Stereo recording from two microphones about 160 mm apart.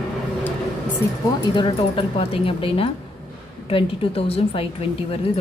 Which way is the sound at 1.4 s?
30° left (ahead or behind).